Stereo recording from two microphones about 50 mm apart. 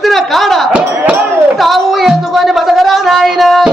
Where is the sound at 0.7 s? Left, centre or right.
Right.